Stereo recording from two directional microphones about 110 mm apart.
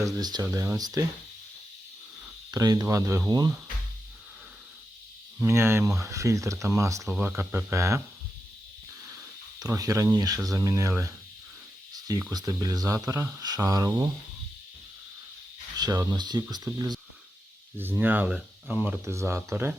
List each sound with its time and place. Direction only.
0.0 s speech: 35° right (ahead or behind)
2.5 s speech: 35° right (ahead or behind)
5.4 s speech: 25° right (ahead or behind)
9.0 s speech: 30° right (ahead or behind)
12.3 s speech: 35° right (ahead or behind)
15.8 s speech: 40° right (ahead or behind)
17.7 s speech: 20° right (ahead or behind)